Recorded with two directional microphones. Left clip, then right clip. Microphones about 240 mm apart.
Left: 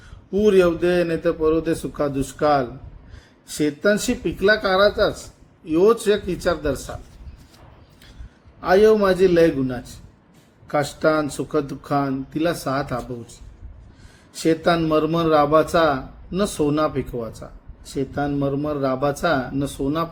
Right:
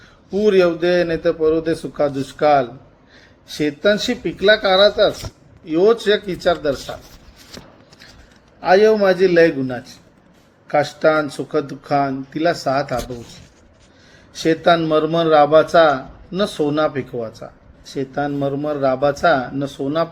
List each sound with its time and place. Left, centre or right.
0.4 s speech: centre
9.0 s speech: centre
14.4 s speech: centre